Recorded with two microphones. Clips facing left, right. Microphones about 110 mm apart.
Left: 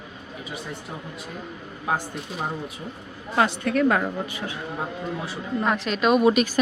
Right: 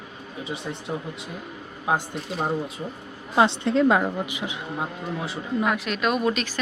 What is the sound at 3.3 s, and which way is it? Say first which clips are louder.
Speech: right 2 dB; 20° right (ahead or behind).